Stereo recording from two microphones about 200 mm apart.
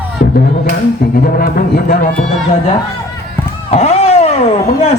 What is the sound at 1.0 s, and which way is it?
Speech, 50° left (ahead or behind).